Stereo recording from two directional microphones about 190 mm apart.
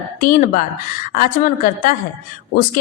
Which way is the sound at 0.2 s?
45° left (ahead or behind).